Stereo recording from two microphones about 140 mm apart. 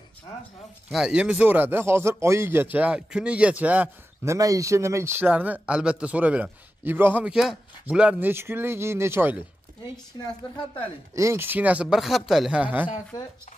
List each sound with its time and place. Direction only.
0.9 s speech: 5° right (ahead or behind)
11.1 s speech: 20° right (ahead or behind)